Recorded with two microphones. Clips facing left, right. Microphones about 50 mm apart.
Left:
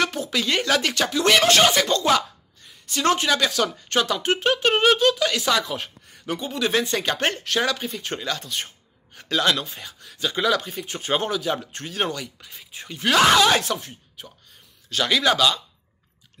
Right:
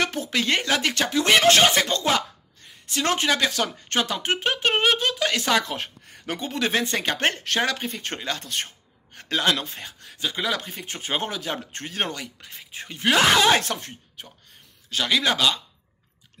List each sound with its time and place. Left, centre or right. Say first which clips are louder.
0.0 s speech: left 1 dB; right
8.5 s a sound: right 1 dB; right
9.4 s speech: left 1 dB; right
13.0 s speech: left 2 dB; centre
13.6 s speech: left 1 dB; right
15.0 s speech: left 2 dB; centre
15.3 s speech: left 2 dB; right